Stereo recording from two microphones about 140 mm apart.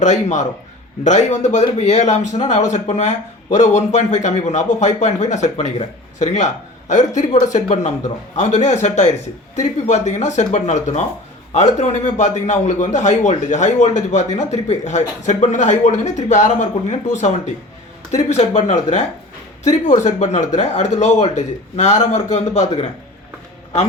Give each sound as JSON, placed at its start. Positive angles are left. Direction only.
{"t": 0.0, "sound": "speech", "side_deg": 60}